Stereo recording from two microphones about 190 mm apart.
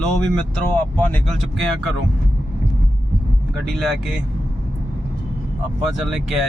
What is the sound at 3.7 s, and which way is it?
Speech, centre (ahead or behind).